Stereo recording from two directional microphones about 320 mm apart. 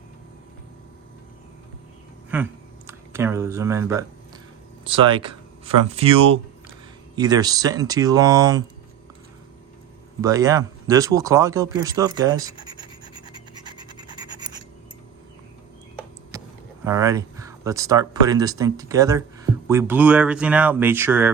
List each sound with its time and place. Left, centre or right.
2.3 s speech: centre
10.2 s speech: centre
16.3 s a sound: centre
16.8 s speech: centre